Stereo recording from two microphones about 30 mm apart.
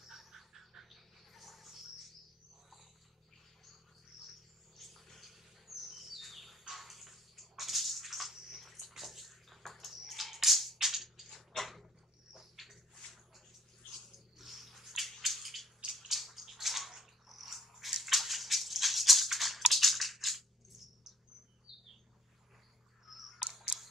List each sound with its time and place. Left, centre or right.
0.0 s bird: centre
4.7 s cricket: centre
5.8 s bird: centre
6.7 s a sound: centre
8.5 s bathtub: centre
9.6 s a sound: centre
10.8 s music: centre
11.2 s a sound: centre
14.1 s squish: centre
15.2 s bathtub: centre
21.7 s bird: centre
23.0 s camera: centre